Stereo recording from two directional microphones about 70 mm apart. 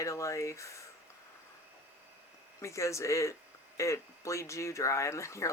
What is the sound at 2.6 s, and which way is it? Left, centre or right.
Speech, left.